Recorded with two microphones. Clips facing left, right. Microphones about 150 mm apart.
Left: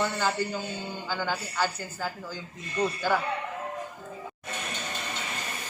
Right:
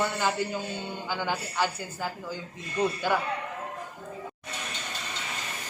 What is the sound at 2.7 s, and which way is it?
Speech, 10° right (ahead or behind).